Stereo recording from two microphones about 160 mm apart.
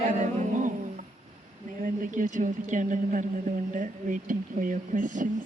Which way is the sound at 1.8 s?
55° right (ahead or behind).